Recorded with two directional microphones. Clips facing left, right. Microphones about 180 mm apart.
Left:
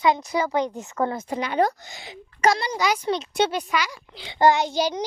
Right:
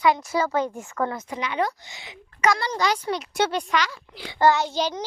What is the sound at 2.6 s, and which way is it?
Speech, 15° left (ahead or behind).